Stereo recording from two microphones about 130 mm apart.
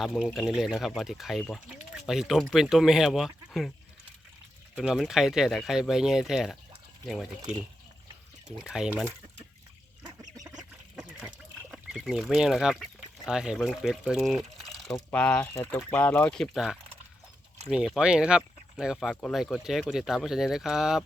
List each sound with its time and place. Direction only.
0.0 s speech: centre (ahead or behind)
4.8 s speech: centre (ahead or behind)
8.4 s speech: 5° right (ahead or behind)
10.0 s duck: 30° right (ahead or behind)
10.6 s a sound: 5° right (ahead or behind)
11.9 s speech: 5° right (ahead or behind)
15.1 s speech: 10° left (ahead or behind)